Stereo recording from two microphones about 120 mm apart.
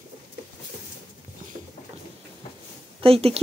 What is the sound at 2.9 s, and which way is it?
Speech, 55° right (ahead or behind).